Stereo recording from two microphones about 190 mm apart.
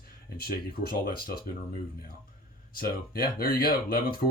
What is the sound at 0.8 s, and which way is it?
Speech, 50° left (ahead or behind).